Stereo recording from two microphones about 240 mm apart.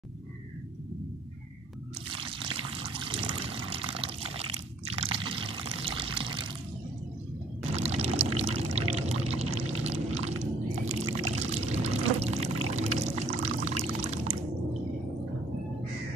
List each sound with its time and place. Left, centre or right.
2.1 s water: right
7.7 s pour: right